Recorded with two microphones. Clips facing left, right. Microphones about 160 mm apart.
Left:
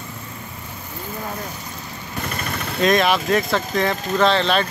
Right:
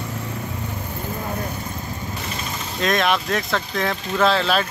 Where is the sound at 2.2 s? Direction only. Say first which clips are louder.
Left 2 dB; 60° left (ahead or behind).